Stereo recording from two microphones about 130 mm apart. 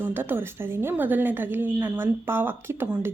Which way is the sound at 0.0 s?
15° right (ahead or behind).